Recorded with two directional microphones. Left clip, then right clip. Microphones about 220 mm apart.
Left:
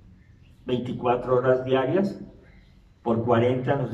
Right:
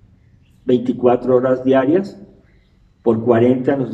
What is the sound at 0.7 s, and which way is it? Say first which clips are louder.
A man's voice: right 10 dB; 45° right (ahead or behind).